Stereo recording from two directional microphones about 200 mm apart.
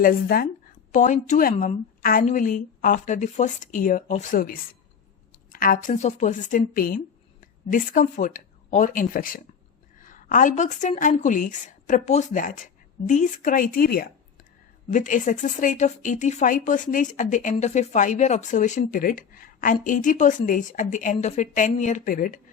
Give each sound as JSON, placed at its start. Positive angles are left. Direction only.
{"t": 0.0, "sound": "a woman's voice", "side_deg": 45}